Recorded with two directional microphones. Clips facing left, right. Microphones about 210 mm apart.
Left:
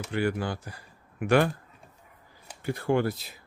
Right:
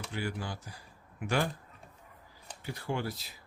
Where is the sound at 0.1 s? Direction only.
65° left (ahead or behind).